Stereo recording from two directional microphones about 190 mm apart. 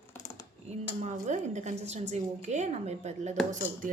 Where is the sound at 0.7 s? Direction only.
35° right (ahead or behind).